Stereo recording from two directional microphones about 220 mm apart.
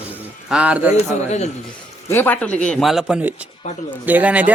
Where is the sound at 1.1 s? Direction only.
30° left (ahead or behind).